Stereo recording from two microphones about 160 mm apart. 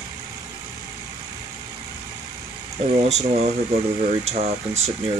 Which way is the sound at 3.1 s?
45° right (ahead or behind).